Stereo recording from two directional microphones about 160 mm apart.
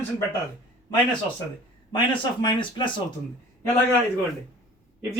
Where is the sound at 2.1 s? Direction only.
30° left (ahead or behind).